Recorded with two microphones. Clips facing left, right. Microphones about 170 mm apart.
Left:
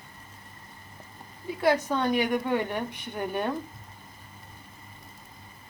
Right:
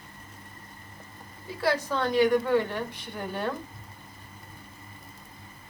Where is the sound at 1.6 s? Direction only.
20° left (ahead or behind).